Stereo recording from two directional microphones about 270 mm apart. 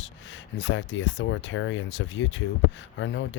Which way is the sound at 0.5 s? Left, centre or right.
Left.